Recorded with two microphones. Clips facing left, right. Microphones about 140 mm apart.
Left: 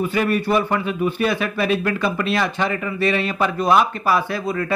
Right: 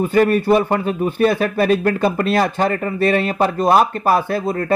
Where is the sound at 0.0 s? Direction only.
45° right (ahead or behind).